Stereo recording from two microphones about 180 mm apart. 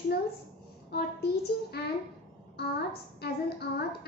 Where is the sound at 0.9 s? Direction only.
60° left (ahead or behind).